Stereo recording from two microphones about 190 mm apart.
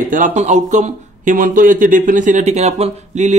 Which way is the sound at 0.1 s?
40° right (ahead or behind).